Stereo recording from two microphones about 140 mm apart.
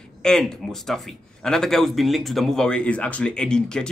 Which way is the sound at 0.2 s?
5° left (ahead or behind).